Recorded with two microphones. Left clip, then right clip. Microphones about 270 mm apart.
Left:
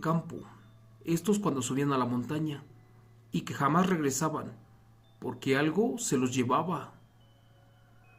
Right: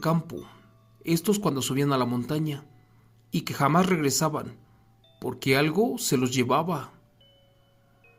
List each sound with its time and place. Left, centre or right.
0.0 s speech: right